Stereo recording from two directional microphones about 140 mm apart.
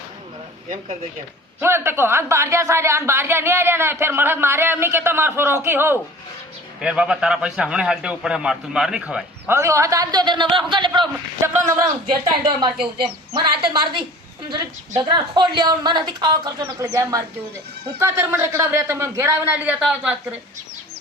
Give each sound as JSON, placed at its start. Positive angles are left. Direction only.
{"t": 1.6, "sound": "speech", "side_deg": -15}
{"t": 9.6, "sound": "a woman's voice", "side_deg": -20}
{"t": 16.6, "sound": "a man's voice", "side_deg": -20}